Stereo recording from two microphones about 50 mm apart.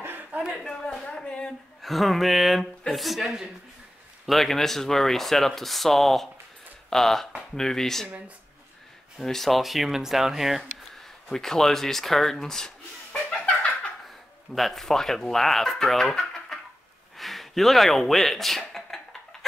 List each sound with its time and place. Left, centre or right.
0.0 s a sound: right
0.7 s speech: centre
1.8 s speech: centre
4.3 s speech: centre
9.2 s speech: centre
11.3 s speech: centre
13.1 s a sound: left
14.5 s speech: centre